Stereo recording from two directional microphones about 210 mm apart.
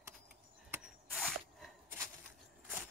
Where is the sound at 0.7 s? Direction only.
Centre (ahead or behind).